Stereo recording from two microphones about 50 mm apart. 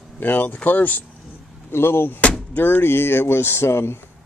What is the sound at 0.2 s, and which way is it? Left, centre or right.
Speech, left.